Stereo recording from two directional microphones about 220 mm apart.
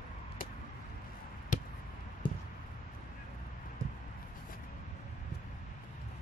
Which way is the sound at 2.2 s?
20° left (ahead or behind).